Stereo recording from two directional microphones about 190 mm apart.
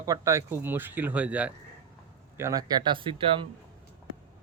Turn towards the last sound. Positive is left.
turn(degrees=-25)  # may be behind; listen again after turning